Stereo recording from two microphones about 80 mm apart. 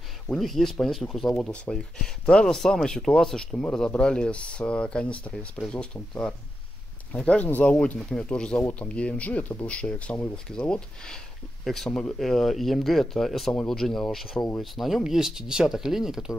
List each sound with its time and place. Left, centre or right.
0.3 s speech: centre